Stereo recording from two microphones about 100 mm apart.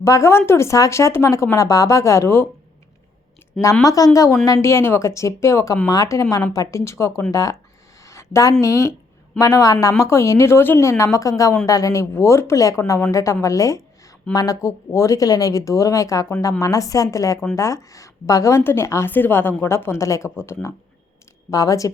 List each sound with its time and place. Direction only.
0.0 s speech: 30° left (ahead or behind)
3.8 s speech: 35° left (ahead or behind)
8.0 s a sound: 30° left (ahead or behind)
8.6 s speech: 30° left (ahead or behind)